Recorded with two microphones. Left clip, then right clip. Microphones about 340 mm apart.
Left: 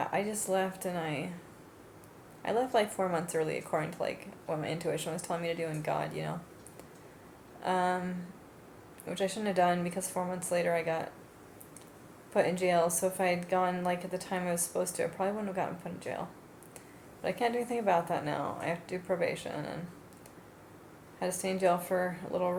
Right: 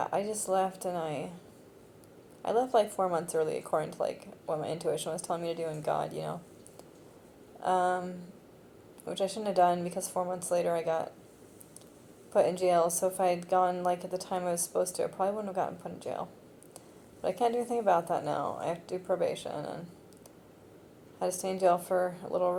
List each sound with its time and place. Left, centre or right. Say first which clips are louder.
0.0 s a woman's voice: right 1 dB; right
2.4 s a woman's voice: right 2 dB; right
7.6 s a woman's voice: right 2 dB; right
12.4 s a woman's voice: right 2 dB; right
17.2 s a woman's voice: right 2 dB; right
21.2 s a woman's voice: right 2 dB; right